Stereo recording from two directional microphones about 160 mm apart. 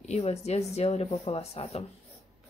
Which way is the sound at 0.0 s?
45° left (ahead or behind).